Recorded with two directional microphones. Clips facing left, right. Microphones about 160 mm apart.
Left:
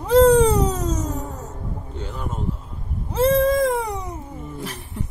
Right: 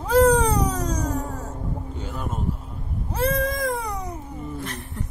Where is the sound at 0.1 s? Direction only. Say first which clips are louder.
Left 4 dB; 25° left (ahead or behind).